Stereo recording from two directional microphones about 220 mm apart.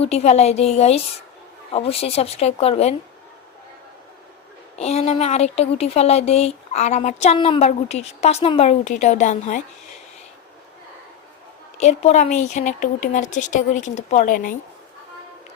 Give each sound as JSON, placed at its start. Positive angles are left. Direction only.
{"t": 0.0, "sound": "speech", "side_deg": 30}
{"t": 4.8, "sound": "speech", "side_deg": 30}
{"t": 11.8, "sound": "speech", "side_deg": 30}